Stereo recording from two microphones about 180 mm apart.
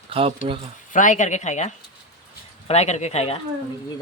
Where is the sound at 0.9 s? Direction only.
45° left (ahead or behind).